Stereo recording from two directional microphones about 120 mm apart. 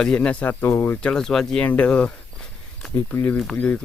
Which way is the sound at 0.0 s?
5° left (ahead or behind).